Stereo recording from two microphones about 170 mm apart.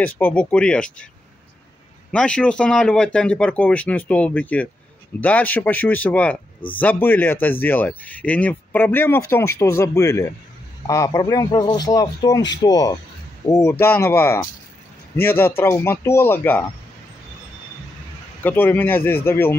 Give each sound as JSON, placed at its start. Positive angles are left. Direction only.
{"t": 0.0, "sound": "speech", "side_deg": 10}
{"t": 2.1, "sound": "a man's voice", "side_deg": 5}
{"t": 18.4, "sound": "speech", "side_deg": 10}